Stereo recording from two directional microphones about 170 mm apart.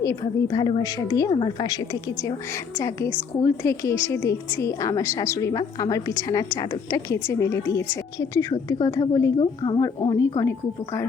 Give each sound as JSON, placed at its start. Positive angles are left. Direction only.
{"t": 0.0, "sound": "a woman's voice", "side_deg": 20}